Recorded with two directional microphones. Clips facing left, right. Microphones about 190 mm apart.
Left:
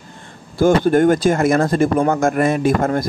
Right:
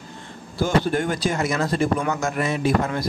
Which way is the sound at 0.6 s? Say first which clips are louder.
Left 8 dB; 50° left (ahead or behind).